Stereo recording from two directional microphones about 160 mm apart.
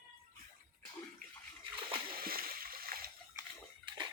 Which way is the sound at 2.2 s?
65° right (ahead or behind).